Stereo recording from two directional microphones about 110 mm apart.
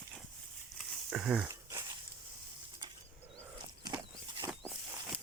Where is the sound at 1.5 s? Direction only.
30° right (ahead or behind).